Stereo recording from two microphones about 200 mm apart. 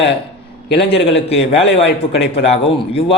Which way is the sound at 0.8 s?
30° left (ahead or behind).